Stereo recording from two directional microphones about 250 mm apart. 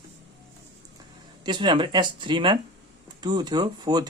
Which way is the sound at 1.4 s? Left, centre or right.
Centre.